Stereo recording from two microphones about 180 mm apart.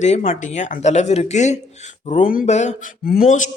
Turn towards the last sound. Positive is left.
turn(degrees=50)  # may be behind; listen again after turning